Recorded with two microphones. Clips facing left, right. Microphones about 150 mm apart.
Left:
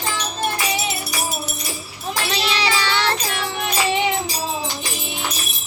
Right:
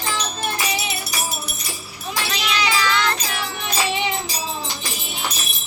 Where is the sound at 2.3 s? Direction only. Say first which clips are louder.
Left 1 dB; 30° left (ahead or behind).